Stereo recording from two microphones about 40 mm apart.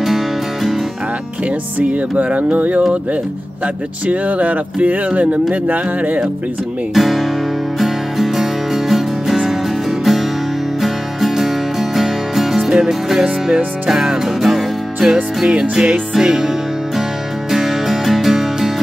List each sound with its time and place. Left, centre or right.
0.0 s music: centre
2.2 s speech: right
6.9 s speech: centre
7.8 s music: centre
12.7 s music: centre